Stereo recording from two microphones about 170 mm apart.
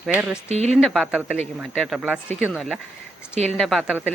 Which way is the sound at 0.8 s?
Centre (ahead or behind).